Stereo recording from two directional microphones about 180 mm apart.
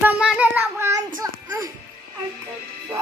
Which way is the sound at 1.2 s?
20° right (ahead or behind).